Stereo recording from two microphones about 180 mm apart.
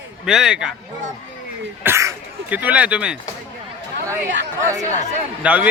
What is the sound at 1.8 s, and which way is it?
Speech, 15° right (ahead or behind).